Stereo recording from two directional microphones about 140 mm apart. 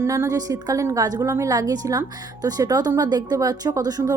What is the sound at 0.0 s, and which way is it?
A woman's voice, 20° right (ahead or behind).